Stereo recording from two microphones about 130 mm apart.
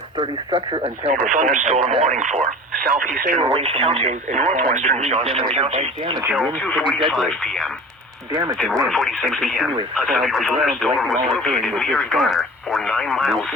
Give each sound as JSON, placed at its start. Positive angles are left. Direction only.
{"t": 0.2, "sound": "speech", "side_deg": -45}
{"t": 1.1, "sound": "speech", "side_deg": -70}
{"t": 3.5, "sound": "speech", "side_deg": -50}
{"t": 6.5, "sound": "speech", "side_deg": 10}
{"t": 8.3, "sound": "speech", "side_deg": -25}
{"t": 8.5, "sound": "speech", "side_deg": 5}